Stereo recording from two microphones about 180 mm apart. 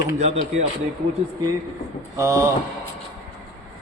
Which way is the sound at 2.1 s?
15° right (ahead or behind).